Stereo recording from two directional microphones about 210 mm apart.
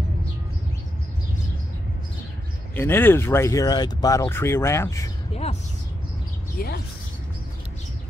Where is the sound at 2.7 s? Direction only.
10° left (ahead or behind).